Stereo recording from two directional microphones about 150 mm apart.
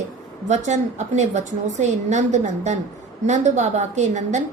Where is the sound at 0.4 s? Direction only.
50° right (ahead or behind).